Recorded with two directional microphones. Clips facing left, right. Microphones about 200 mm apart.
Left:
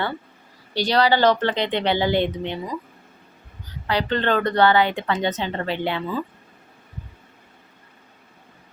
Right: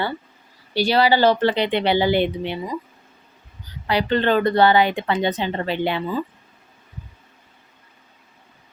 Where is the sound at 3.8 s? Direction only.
10° right (ahead or behind).